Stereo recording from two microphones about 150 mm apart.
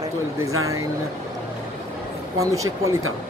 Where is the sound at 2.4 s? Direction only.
20° right (ahead or behind).